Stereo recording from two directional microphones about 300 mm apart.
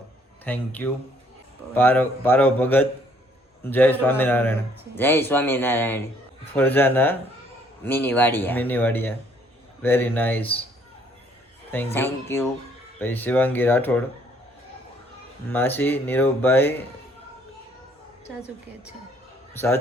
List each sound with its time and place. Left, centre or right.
0.4 s a man's voice: centre
11.9 s speech: centre
15.4 s speech: centre
19.5 s speech: centre